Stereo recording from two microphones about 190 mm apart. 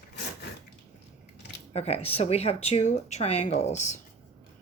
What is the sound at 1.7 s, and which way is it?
Speech, 35° left (ahead or behind).